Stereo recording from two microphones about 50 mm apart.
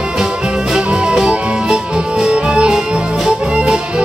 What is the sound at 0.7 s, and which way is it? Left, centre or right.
Music, centre.